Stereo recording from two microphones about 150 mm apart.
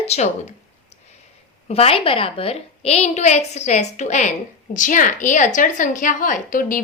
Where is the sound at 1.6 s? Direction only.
40° left (ahead or behind).